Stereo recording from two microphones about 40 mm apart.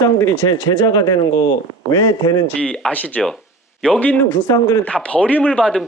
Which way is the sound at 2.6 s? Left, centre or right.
Left.